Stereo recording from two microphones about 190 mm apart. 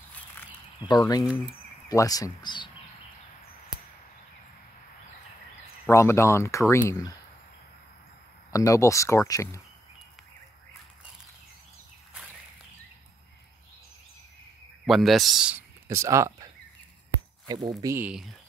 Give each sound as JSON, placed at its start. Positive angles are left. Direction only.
{"t": 0.8, "sound": "speech", "side_deg": 20}
{"t": 5.9, "sound": "speech", "side_deg": 15}
{"t": 8.5, "sound": "speech", "side_deg": 15}
{"t": 14.9, "sound": "speech", "side_deg": 0}
{"t": 17.5, "sound": "speech", "side_deg": -20}